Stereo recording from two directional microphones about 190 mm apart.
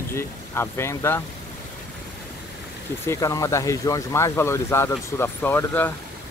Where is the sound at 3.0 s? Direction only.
15° left (ahead or behind).